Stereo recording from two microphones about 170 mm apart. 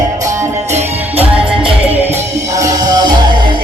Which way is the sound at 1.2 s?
5° right (ahead or behind).